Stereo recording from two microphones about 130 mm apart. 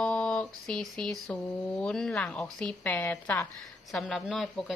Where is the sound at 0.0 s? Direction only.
5° left (ahead or behind).